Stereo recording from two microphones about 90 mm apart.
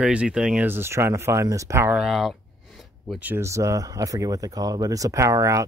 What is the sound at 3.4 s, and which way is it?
Speech, 35° right (ahead or behind).